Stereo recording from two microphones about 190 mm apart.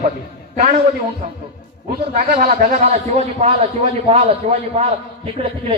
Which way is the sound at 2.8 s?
35° right (ahead or behind).